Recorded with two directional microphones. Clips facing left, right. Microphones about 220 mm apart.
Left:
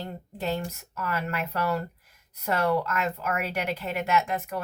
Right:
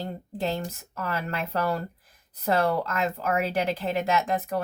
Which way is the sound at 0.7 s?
30° right (ahead or behind).